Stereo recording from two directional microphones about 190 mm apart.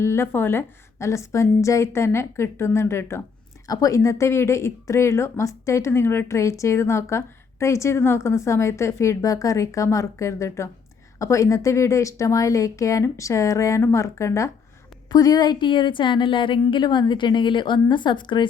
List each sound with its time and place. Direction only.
0.0 s a woman's voice: 15° left (ahead or behind)